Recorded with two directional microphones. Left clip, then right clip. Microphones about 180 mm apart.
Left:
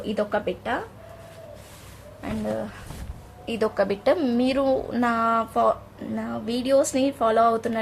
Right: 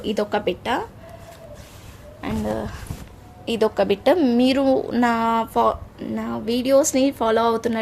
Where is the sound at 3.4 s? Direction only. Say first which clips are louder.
Right 4 dB; 45° right (ahead or behind).